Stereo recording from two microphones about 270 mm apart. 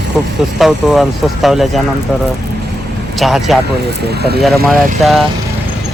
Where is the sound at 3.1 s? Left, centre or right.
Centre.